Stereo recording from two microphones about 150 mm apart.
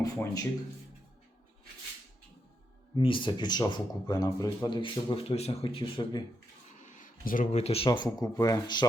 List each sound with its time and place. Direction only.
0.0 s speech: 25° left (ahead or behind)
2.9 s speech: 35° left (ahead or behind)
6.7 s a sound: 55° left (ahead or behind)
7.6 s speech: 40° left (ahead or behind)
7.9 s speech: 25° left (ahead or behind)